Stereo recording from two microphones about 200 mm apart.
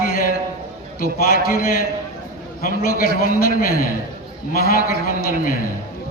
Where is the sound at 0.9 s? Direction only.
50° left (ahead or behind).